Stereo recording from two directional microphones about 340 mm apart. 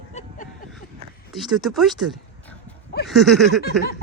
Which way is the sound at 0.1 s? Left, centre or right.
Centre.